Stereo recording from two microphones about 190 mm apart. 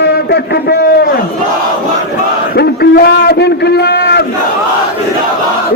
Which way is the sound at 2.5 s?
55° left (ahead or behind).